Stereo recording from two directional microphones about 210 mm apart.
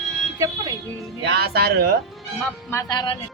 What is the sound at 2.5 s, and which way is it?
Speech, 15° left (ahead or behind).